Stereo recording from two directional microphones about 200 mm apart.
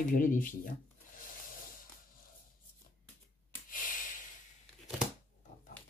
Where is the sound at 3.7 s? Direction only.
45° left (ahead or behind).